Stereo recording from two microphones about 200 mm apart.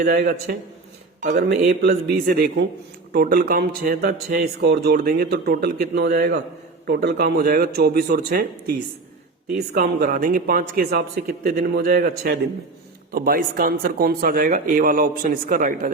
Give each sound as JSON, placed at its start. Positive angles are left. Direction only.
{"t": 0.0, "sound": "speech", "side_deg": -50}